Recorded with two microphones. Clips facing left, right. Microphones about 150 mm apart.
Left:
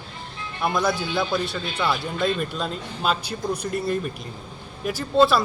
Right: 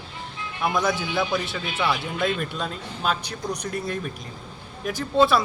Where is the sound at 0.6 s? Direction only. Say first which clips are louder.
Left 1 dB; centre (ahead or behind).